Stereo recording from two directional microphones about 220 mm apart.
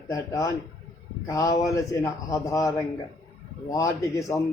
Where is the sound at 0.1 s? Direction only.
15° left (ahead or behind).